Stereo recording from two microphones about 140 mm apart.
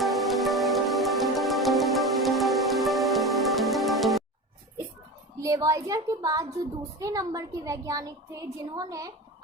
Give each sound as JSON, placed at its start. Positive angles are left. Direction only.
{"t": 0.0, "sound": "music", "side_deg": 0}
{"t": 5.4, "sound": "a woman's voice", "side_deg": -25}